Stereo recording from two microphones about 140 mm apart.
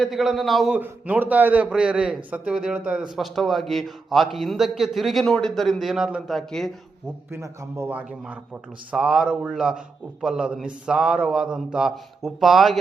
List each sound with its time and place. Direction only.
0.0 s speech: centre (ahead or behind)
0.8 s a man's voice: 10° right (ahead or behind)
7.3 s a man's voice: 20° right (ahead or behind); by 12.8 s centre (ahead or behind)